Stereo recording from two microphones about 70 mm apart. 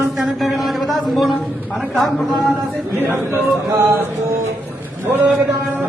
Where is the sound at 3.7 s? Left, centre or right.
Right.